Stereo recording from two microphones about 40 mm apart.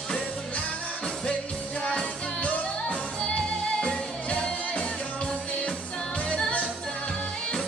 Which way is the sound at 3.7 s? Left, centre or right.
Left.